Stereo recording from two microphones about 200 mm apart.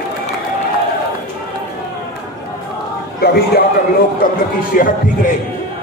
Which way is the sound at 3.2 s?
50° left (ahead or behind).